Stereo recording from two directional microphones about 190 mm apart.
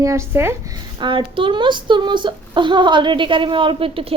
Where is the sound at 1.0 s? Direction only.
25° right (ahead or behind).